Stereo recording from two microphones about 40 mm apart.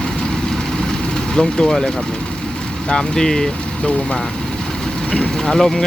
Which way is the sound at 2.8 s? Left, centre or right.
Centre.